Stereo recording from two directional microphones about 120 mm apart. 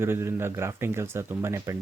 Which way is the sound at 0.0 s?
20° right (ahead or behind).